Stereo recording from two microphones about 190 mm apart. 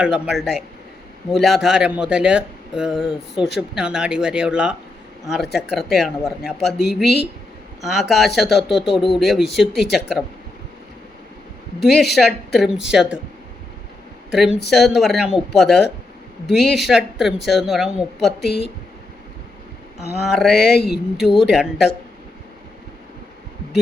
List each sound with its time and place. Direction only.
0.0 s speech: centre (ahead or behind)
11.8 s speech: centre (ahead or behind)
14.3 s speech: 5° right (ahead or behind)
20.2 s speech: centre (ahead or behind)